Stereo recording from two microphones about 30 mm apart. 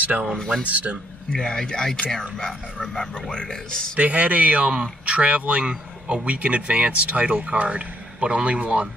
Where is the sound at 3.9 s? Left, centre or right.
Right.